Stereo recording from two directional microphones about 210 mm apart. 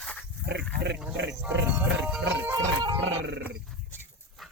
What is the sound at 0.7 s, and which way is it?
Pig, 55° right (ahead or behind).